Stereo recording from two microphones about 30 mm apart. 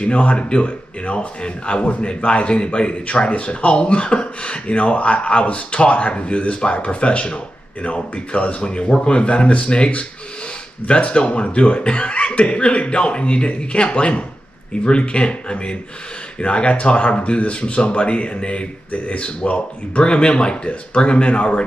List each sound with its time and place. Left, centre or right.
0.0 s speech: left